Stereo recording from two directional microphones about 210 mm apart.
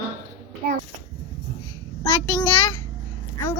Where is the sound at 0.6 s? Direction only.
45° right (ahead or behind).